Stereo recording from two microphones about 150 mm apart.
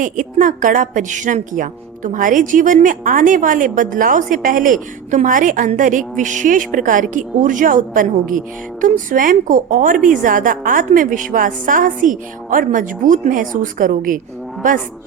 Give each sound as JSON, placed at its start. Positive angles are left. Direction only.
{"t": 0.0, "sound": "a woman's voice", "side_deg": -60}